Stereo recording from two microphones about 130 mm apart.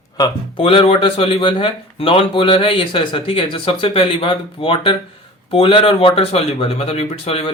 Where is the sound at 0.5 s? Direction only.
45° left (ahead or behind).